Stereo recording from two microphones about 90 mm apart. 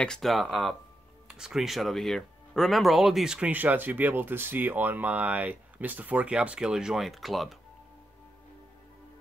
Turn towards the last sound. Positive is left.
turn(degrees=0)  # may be behind; listen again after turning